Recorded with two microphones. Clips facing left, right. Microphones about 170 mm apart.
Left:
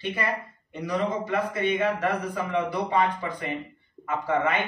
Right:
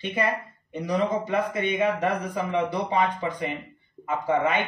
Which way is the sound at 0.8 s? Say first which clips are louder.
Right 2 dB; 20° right (ahead or behind).